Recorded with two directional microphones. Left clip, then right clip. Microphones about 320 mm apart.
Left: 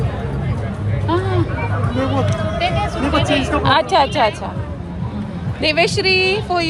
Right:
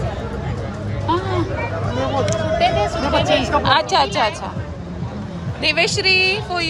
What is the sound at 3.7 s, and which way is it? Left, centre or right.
Speech, centre.